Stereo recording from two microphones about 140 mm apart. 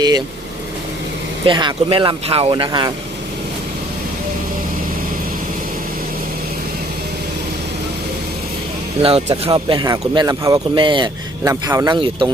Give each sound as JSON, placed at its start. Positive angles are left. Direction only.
{"t": 1.5, "sound": "speech", "side_deg": -35}
{"t": 9.0, "sound": "speech", "side_deg": -45}
{"t": 11.4, "sound": "speech", "side_deg": -25}